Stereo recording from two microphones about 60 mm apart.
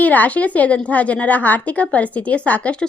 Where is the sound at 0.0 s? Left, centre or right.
Left.